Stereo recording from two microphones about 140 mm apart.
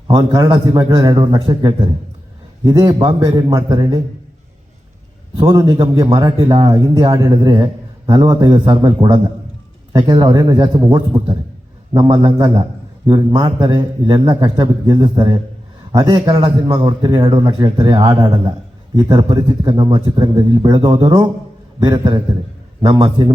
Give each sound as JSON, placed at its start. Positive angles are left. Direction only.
{"t": 0.1, "sound": "a man's voice", "side_deg": -30}
{"t": 5.4, "sound": "a man's voice", "side_deg": -30}